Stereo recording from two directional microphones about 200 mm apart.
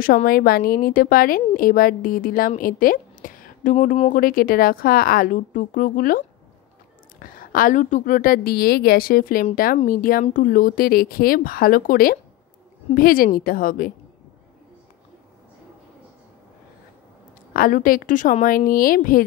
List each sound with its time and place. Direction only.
0.0 s a woman's voice: 45° left (ahead or behind)
17.5 s a woman's voice: 45° left (ahead or behind)